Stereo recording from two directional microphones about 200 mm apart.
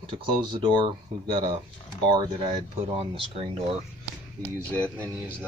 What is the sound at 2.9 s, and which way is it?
Speech, 30° right (ahead or behind).